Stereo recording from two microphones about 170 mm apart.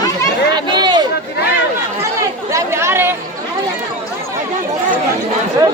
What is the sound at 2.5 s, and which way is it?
Chatter, 15° right (ahead or behind).